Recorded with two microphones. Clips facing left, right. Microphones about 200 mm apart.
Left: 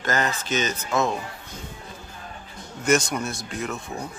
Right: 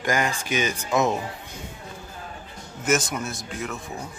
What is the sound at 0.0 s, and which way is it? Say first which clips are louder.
Speech: right 1 dB; 15° right (ahead or behind).